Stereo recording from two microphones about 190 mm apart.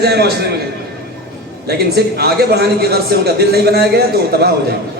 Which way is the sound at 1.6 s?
55° right (ahead or behind).